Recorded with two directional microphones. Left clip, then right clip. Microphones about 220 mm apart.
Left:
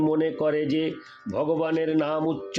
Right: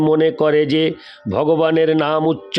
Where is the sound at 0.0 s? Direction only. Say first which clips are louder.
Right 9 dB; 50° right (ahead or behind).